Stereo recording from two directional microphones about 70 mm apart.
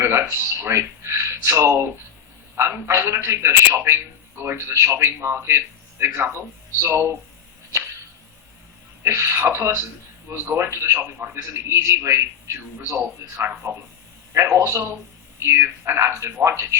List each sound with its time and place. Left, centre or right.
0.0 s a man's voice: right
9.0 s a man's voice: right